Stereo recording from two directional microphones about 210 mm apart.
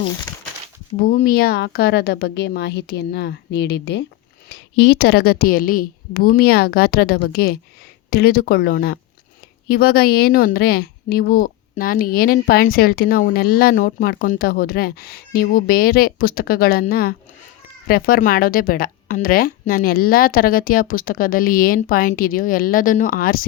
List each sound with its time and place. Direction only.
0.9 s a woman's voice: 40° left (ahead or behind)